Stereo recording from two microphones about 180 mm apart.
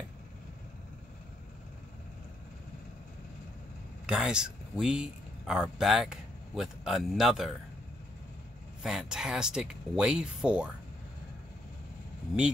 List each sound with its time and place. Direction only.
4.0 s speech: 5° right (ahead or behind)
8.8 s speech: 5° right (ahead or behind)